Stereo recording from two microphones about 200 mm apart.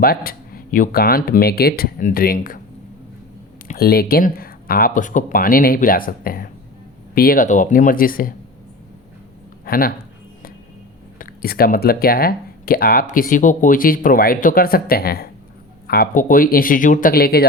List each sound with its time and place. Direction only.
0.0 s speech: 50° left (ahead or behind)
3.7 s speech: 50° left (ahead or behind)
9.6 s speech: 45° left (ahead or behind)
11.2 s speech: 45° left (ahead or behind)